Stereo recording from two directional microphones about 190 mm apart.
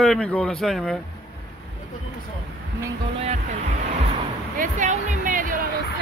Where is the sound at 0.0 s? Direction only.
5° left (ahead or behind).